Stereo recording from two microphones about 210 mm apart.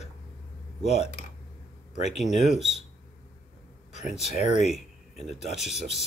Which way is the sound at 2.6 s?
Centre (ahead or behind).